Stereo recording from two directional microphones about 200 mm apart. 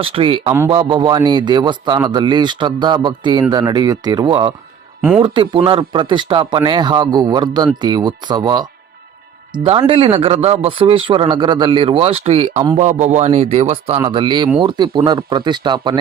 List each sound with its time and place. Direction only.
0.0 s speech: 25° right (ahead or behind)
9.6 s speech: 30° right (ahead or behind)